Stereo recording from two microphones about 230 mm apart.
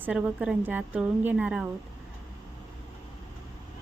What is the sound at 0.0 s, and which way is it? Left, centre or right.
Speech, centre.